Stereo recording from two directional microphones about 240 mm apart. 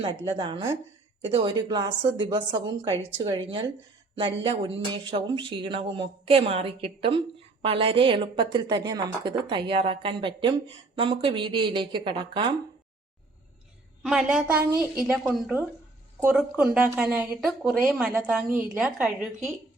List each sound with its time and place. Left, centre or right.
0.0 s a woman's voice: right
14.0 s a woman's voice: centre